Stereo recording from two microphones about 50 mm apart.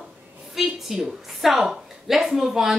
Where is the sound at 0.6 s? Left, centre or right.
Centre.